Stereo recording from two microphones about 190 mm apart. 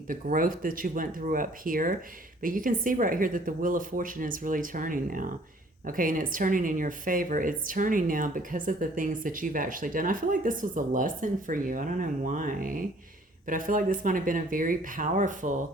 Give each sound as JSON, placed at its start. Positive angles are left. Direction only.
{"t": 0.1, "sound": "a woman's voice", "side_deg": -45}